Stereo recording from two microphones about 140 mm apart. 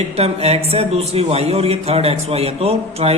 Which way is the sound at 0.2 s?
45° right (ahead or behind).